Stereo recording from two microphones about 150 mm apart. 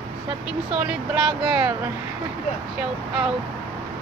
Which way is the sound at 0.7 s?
5° right (ahead or behind).